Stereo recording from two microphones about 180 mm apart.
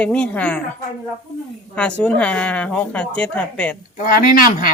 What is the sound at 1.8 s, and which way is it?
Speech, 5° left (ahead or behind).